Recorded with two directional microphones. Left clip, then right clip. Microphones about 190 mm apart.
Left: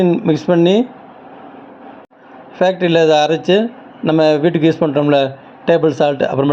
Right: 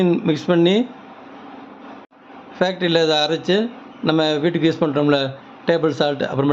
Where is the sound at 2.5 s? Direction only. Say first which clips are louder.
Left 5 dB; 15° left (ahead or behind).